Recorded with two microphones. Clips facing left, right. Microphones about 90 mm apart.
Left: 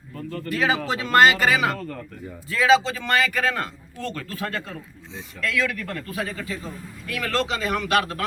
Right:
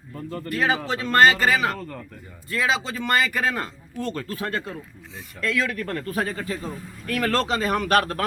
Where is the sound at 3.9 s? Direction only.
20° right (ahead or behind); by 8.3 s 45° right (ahead or behind).